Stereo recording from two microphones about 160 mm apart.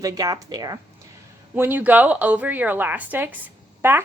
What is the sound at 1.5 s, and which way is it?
A woman's voice, 10° right (ahead or behind).